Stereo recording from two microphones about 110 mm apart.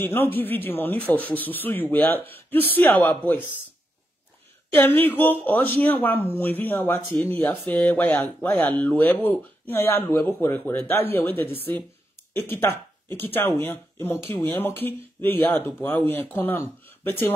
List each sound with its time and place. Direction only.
0.0 s speech: 20° left (ahead or behind)
4.7 s speech: 15° left (ahead or behind)